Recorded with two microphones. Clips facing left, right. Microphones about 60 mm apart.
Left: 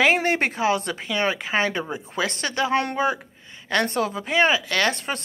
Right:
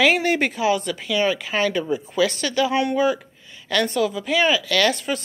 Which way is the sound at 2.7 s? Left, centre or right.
Left.